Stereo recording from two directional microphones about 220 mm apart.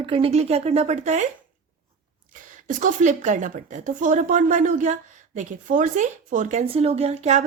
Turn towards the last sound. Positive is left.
turn(degrees=-30)  # may be behind; listen again after turning